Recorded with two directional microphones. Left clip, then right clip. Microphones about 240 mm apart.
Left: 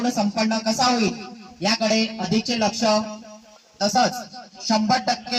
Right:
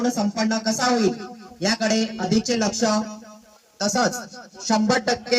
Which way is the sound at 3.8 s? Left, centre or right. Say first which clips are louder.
Left 2 dB; centre.